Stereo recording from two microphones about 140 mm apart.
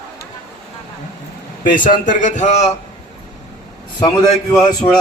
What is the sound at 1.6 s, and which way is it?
Speech, 70° left (ahead or behind).